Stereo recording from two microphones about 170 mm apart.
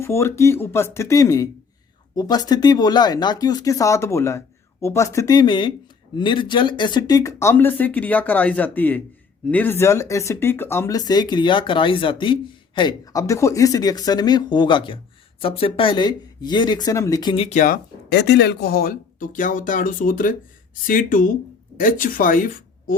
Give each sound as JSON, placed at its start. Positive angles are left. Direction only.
{"t": 0.0, "sound": "speech", "side_deg": 15}
{"t": 17.3, "sound": "speech", "side_deg": 35}
{"t": 18.1, "sound": "speech", "side_deg": 90}